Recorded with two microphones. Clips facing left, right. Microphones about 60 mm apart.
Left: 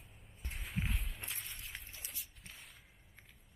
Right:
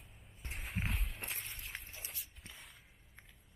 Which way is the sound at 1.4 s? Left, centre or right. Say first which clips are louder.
Right 2 dB; centre.